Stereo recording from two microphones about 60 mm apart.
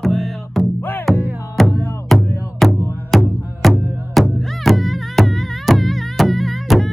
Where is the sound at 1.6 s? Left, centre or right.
Centre.